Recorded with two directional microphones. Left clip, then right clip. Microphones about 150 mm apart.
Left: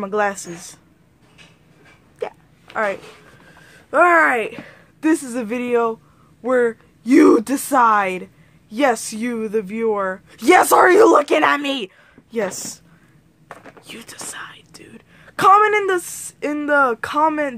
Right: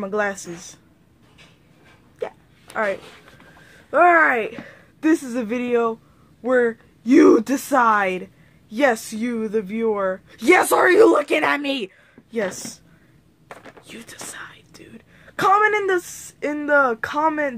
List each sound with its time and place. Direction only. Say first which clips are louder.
0.0 s a woman's voice: left 3 dB; 10° left (ahead or behind)
2.1 s hiccup: left 2 dB; 10° left (ahead or behind)
3.7 s a woman's voice: left 1 dB; 10° left (ahead or behind); by 11.9 s 30° left (ahead or behind)
12.3 s a woman's voice: left 2 dB; 15° left (ahead or behind)
13.8 s speech: left 3 dB; 15° left (ahead or behind)